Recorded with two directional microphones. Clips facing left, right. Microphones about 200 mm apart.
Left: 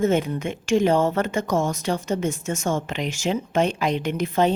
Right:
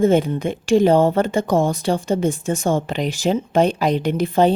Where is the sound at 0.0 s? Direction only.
30° right (ahead or behind).